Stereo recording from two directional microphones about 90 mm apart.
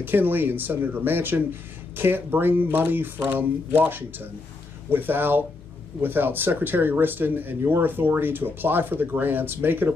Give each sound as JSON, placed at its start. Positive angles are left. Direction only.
{"t": 0.0, "sound": "speech", "side_deg": -20}